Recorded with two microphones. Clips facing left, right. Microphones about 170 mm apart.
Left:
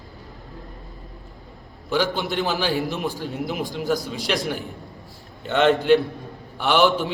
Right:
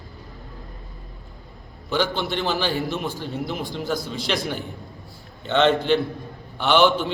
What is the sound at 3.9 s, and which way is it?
Speech, 40° left (ahead or behind).